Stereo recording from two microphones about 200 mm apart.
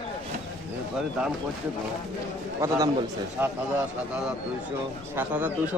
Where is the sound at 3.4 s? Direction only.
10° right (ahead or behind).